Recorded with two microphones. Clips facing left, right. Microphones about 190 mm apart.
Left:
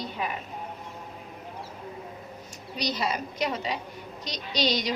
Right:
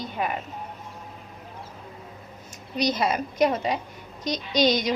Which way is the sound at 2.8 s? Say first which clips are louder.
Right 5 dB; 50° right (ahead or behind).